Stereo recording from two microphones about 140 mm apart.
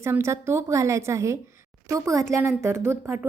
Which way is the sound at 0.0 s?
20° right (ahead or behind).